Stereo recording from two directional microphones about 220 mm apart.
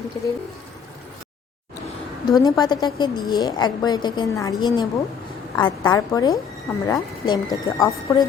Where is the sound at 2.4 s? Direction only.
20° left (ahead or behind).